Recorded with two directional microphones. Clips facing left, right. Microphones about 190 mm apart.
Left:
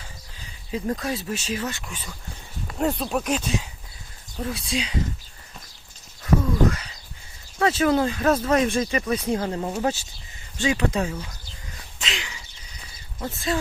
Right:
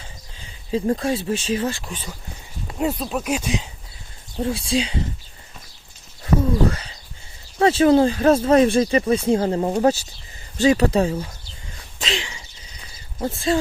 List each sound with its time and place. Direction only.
0.3 s speech: 30° right (ahead or behind)
2.7 s speech: 5° right (ahead or behind)
4.4 s speech: 30° right (ahead or behind)
6.2 s speech: 30° right (ahead or behind)
11.9 s a sound: 30° right (ahead or behind)
13.1 s speech: 30° right (ahead or behind)